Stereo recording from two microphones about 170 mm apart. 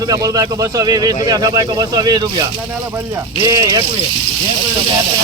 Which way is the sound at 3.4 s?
20° right (ahead or behind).